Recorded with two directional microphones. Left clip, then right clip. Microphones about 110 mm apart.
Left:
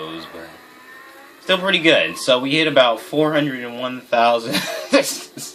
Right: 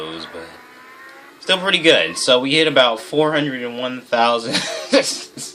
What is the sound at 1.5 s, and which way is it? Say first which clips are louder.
Speech: right 1 dB; 35° right (ahead or behind).